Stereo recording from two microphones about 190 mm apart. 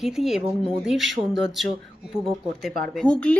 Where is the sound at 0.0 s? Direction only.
Centre (ahead or behind).